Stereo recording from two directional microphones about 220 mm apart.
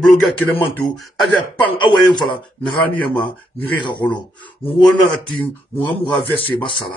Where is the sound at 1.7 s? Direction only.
20° left (ahead or behind).